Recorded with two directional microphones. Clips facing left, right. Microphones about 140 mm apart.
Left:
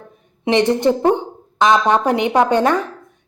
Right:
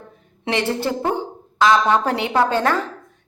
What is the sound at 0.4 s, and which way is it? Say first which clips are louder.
A woman's voice: left 7 dB; 20° left (ahead or behind).